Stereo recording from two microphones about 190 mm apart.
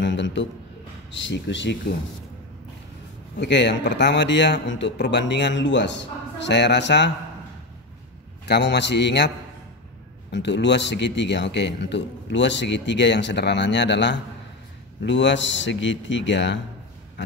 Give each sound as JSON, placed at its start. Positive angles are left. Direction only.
{"t": 0.0, "sound": "a man's voice", "side_deg": 70}
{"t": 3.3, "sound": "speech", "side_deg": 70}
{"t": 8.5, "sound": "a man's voice", "side_deg": 65}
{"t": 10.3, "sound": "speech", "side_deg": 70}